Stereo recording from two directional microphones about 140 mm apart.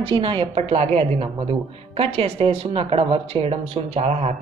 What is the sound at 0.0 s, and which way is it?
Speech, 35° right (ahead or behind).